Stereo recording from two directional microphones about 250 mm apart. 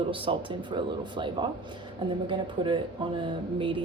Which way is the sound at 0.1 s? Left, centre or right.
Right.